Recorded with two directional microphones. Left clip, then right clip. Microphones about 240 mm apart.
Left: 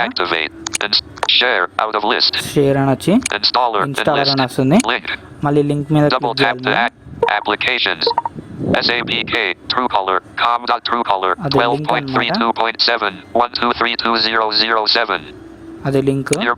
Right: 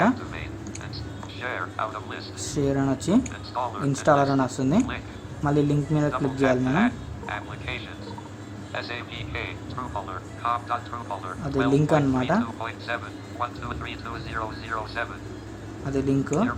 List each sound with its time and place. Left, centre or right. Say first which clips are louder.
0.0 s speech: left 8 dB; left
2.4 s speech: left 11 dB; left
3.2 s speech: left 15 dB; left
4.4 s speech: left 11 dB; left
4.8 s speech: left 11 dB; left
5.4 s speech: left 7 dB; left
6.1 s speech: left 8 dB; left
15.9 s speech: left 9 dB; left